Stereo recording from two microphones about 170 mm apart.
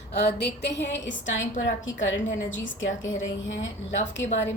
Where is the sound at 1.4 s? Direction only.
50° left (ahead or behind).